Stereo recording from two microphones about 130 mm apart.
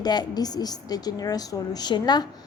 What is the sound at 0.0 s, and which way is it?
A woman's voice, 35° left (ahead or behind).